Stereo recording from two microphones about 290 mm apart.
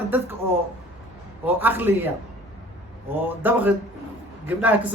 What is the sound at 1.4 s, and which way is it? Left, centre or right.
Speech, centre.